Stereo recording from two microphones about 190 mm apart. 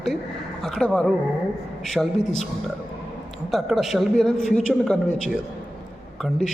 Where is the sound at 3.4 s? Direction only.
Centre (ahead or behind).